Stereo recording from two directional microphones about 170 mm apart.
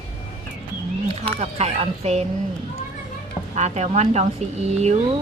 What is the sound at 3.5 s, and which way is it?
Speech, 40° right (ahead or behind).